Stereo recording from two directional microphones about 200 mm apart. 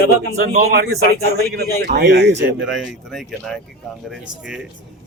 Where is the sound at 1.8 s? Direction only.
50° right (ahead or behind).